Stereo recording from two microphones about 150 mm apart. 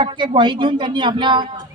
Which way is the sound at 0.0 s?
35° right (ahead or behind).